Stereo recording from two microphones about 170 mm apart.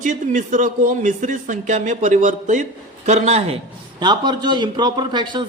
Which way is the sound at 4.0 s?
25° right (ahead or behind).